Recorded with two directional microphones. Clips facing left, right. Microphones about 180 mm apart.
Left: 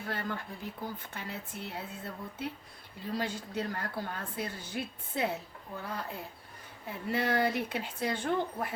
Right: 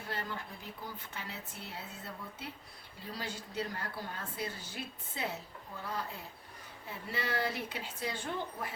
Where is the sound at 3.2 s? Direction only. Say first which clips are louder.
Left 4 dB; 55° left (ahead or behind).